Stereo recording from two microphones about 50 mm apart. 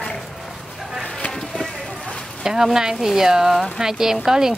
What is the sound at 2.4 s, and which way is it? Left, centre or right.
A woman's voice, centre.